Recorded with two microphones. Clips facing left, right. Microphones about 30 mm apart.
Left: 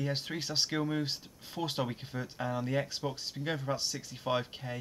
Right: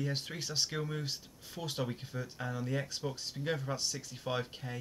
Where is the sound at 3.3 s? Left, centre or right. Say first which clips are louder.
Left 1 dB; centre.